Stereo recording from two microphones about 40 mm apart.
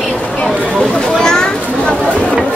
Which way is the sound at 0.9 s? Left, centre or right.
Centre.